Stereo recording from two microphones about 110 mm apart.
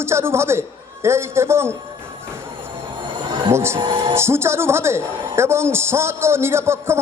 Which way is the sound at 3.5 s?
25° right (ahead or behind).